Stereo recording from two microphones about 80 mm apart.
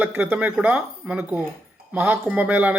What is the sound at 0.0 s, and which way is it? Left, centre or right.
Speech, centre.